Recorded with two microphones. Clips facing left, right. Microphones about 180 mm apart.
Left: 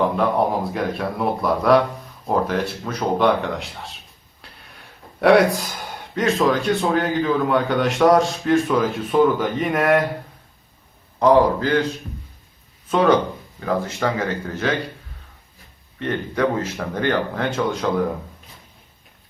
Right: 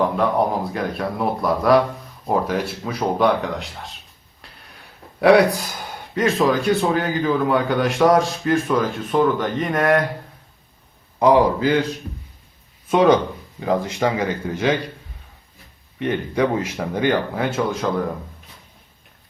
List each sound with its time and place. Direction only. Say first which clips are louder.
0.0 s speech: even; centre (ahead or behind)
5.2 s speech: right 1 dB; centre (ahead or behind)
11.2 s speech: even; 10° right (ahead or behind)
12.9 s speech: right 2 dB; 15° right (ahead or behind)
16.0 s speech: right 2 dB; 15° right (ahead or behind)